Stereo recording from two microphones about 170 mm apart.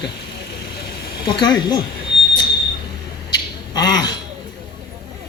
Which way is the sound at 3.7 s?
25° left (ahead or behind).